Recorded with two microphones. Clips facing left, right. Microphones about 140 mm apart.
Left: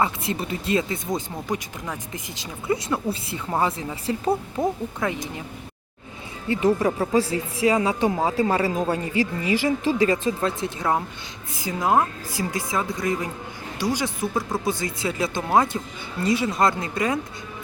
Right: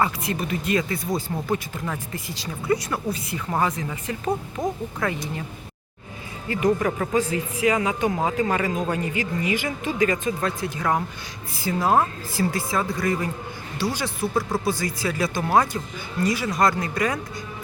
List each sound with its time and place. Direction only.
0.0 s speech: 25° left (ahead or behind)
4.6 s speech: 5° left (ahead or behind)
5.0 s speech: 20° left (ahead or behind)
6.5 s speech: 25° left (ahead or behind)